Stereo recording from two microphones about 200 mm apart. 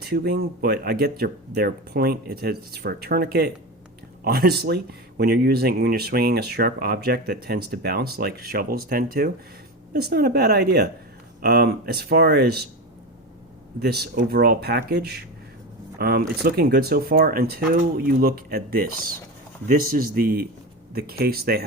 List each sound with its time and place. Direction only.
0.0 s speech: 50° right (ahead or behind)
13.7 s speech: 50° right (ahead or behind)